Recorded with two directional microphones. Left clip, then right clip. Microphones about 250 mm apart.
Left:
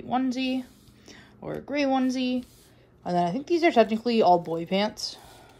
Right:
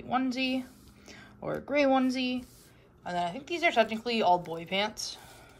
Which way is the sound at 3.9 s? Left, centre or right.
Centre.